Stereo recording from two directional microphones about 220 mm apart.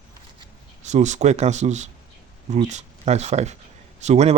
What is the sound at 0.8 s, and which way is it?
Speech, 30° right (ahead or behind).